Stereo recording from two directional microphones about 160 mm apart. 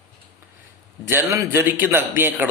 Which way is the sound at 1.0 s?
15° right (ahead or behind).